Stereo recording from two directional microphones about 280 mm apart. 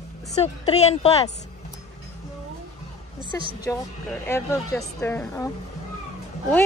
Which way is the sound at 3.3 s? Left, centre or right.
Centre.